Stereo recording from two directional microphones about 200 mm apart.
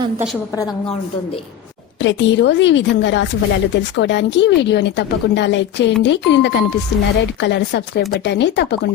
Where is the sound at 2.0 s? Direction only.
65° left (ahead or behind).